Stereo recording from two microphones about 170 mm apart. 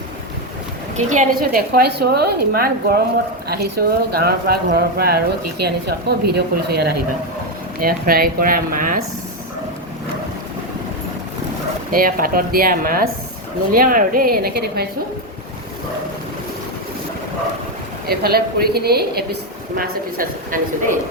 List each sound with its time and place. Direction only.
0.9 s a woman's voice: 45° right (ahead or behind)
11.9 s a woman's voice: 55° right (ahead or behind)
18.0 s a woman's voice: 65° right (ahead or behind)